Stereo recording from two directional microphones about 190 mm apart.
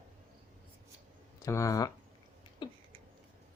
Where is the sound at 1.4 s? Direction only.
15° left (ahead or behind).